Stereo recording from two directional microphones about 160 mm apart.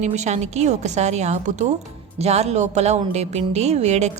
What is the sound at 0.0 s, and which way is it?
A woman's voice, 45° right (ahead or behind).